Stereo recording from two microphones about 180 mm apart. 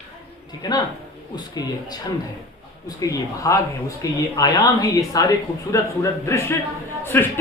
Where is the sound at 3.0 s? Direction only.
20° left (ahead or behind).